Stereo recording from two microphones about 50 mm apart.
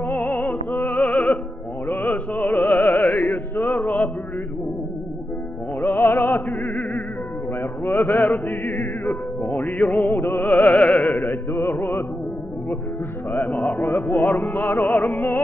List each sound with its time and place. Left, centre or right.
0.0 s opera: left
0.9 s music: left
5.8 s music: left
6.1 s opera: left
7.8 s music: left
9.8 s music: left
10.0 s opera: left
10.5 s music: left
11.5 s music: left
13.3 s music: left
13.7 s speech: left
14.2 s music: left